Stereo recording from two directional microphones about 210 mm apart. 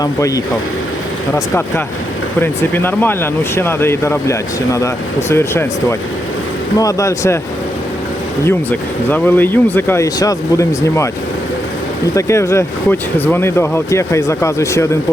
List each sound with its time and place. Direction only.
0.0 s speech: 15° left (ahead or behind)
2.4 s speech: 10° left (ahead or behind)
8.4 s speech: 10° left (ahead or behind)
12.1 s speech: 15° left (ahead or behind)